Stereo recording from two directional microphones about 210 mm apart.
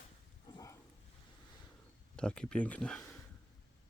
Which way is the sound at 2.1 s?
5° left (ahead or behind).